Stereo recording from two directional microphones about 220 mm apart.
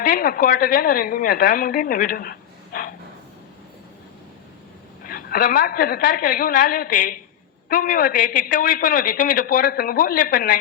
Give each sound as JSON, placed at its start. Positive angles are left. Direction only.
{"t": 0.0, "sound": "a man's voice", "side_deg": 40}
{"t": 5.0, "sound": "a man's voice", "side_deg": 40}